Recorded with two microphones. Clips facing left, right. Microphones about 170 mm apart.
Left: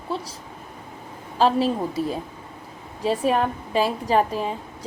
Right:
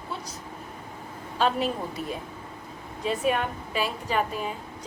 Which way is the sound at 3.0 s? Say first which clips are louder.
Left 5 dB; 35° left (ahead or behind).